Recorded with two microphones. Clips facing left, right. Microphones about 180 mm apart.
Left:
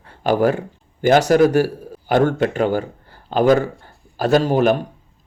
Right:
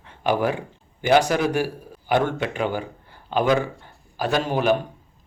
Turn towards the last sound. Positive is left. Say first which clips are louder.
# left 6 dB
turn(degrees=40)  # may be behind; listen again after turning